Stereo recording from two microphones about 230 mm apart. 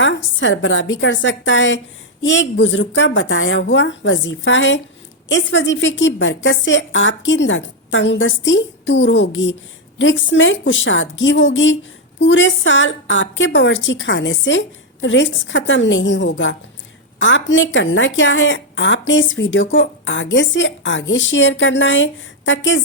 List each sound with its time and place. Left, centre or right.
0.0 s a woman's voice: left